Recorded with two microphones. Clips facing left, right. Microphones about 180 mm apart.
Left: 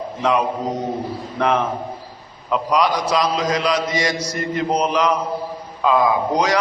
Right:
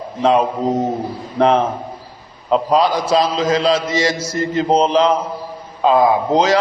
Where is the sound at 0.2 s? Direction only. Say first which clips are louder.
Right 5 dB; 25° right (ahead or behind).